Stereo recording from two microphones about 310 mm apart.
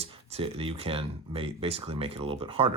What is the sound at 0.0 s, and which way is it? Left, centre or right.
Speech, centre.